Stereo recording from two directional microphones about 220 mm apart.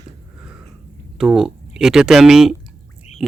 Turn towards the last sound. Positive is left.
turn(degrees=0)  # may be behind; listen again after turning